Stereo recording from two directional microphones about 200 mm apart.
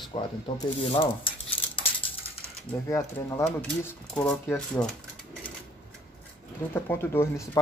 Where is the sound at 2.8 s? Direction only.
15° left (ahead or behind).